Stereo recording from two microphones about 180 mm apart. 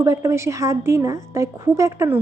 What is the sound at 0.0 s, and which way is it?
Speech, 15° right (ahead or behind).